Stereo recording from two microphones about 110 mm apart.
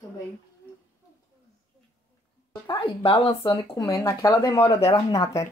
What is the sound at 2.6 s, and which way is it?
Speech, 50° left (ahead or behind).